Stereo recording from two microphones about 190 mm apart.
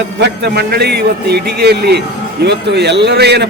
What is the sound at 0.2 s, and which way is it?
A man's voice, 60° right (ahead or behind).